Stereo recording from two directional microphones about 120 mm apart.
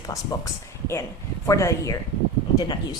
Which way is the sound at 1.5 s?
25° left (ahead or behind).